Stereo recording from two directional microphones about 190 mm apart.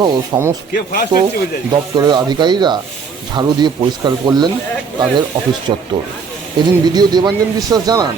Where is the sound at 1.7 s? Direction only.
20° right (ahead or behind).